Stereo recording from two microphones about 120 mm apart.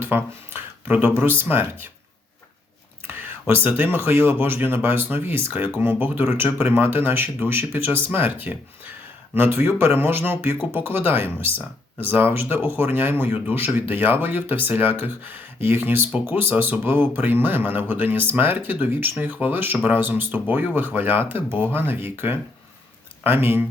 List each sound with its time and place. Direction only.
0.0 s speech: 15° right (ahead or behind)
3.1 s speech: 15° right (ahead or behind)